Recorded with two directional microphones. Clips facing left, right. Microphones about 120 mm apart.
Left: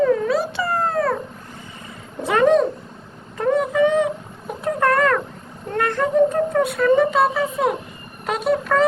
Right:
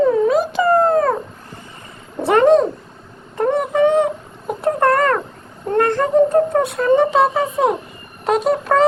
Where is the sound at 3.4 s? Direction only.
30° right (ahead or behind).